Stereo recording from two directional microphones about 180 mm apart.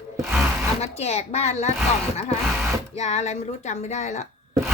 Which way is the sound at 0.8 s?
35° left (ahead or behind).